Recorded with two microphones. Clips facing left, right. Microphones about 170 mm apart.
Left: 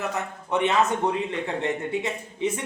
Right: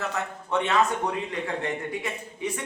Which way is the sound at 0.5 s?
20° left (ahead or behind).